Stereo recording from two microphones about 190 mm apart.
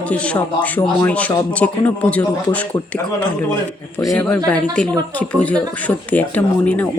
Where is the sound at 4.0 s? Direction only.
15° left (ahead or behind).